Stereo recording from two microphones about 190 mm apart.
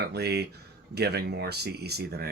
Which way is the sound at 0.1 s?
60° right (ahead or behind).